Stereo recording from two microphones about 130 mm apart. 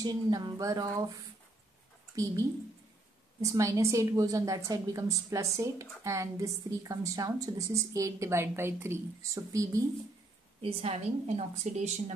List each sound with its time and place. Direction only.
0.0 s a woman's voice: 30° right (ahead or behind)
3.3 s a woman's voice: 25° right (ahead or behind)
10.6 s a woman's voice: 50° right (ahead or behind)